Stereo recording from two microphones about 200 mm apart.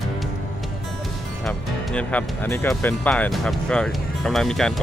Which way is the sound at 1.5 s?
5° left (ahead or behind).